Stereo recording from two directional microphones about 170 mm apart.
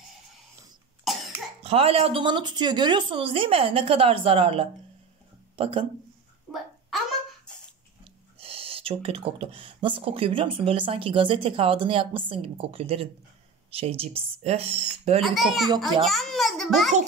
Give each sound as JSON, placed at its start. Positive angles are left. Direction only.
{"t": 1.6, "sound": "speech", "side_deg": -35}
{"t": 6.5, "sound": "a child's voice", "side_deg": 0}
{"t": 8.0, "sound": "speech", "side_deg": -35}
{"t": 15.2, "sound": "a child's voice", "side_deg": 0}